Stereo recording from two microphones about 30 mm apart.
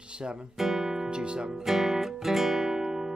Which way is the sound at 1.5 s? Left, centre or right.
Centre.